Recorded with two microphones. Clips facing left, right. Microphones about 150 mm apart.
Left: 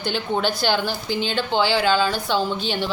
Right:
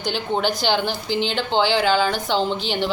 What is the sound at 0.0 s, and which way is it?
A woman's voice, 15° right (ahead or behind).